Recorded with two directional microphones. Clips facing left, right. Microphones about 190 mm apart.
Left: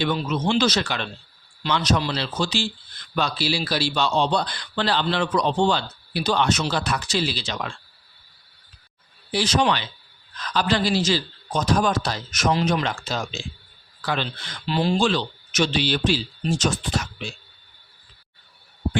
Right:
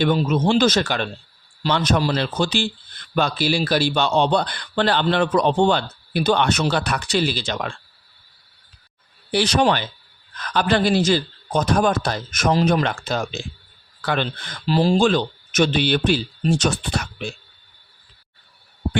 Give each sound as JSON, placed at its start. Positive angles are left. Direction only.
{"t": 0.0, "sound": "a man's voice", "side_deg": -50}
{"t": 9.3, "sound": "a man's voice", "side_deg": -65}
{"t": 9.6, "sound": "a man's voice", "side_deg": -50}